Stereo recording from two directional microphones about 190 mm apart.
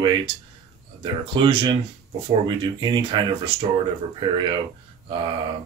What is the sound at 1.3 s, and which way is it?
Speech, 25° right (ahead or behind).